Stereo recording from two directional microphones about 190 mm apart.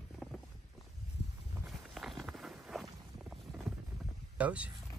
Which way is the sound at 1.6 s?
Centre (ahead or behind).